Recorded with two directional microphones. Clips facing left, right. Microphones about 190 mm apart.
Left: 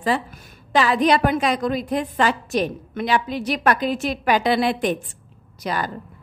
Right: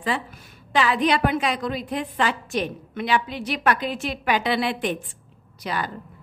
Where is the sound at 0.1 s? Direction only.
40° left (ahead or behind).